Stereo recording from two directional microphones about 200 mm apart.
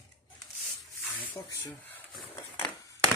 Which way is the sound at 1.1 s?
10° left (ahead or behind).